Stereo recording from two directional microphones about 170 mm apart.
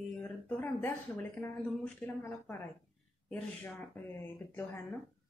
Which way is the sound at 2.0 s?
10° left (ahead or behind).